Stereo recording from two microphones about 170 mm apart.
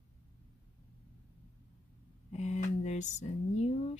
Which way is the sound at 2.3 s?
40° left (ahead or behind).